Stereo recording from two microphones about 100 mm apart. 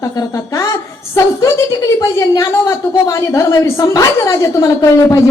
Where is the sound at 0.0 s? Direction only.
35° left (ahead or behind).